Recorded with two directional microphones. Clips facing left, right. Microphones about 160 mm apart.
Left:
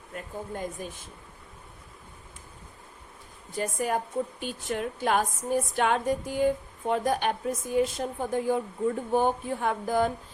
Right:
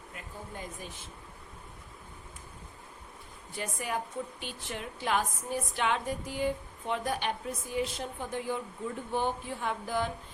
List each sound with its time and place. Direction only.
0.1 s speech: 50° left (ahead or behind)
3.5 s a woman's voice: 45° left (ahead or behind)